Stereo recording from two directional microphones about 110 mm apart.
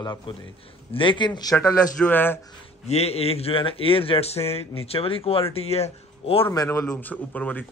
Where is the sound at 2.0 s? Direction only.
15° left (ahead or behind).